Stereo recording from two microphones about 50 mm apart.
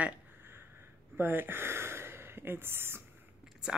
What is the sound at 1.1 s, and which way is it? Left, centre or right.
Speech, right.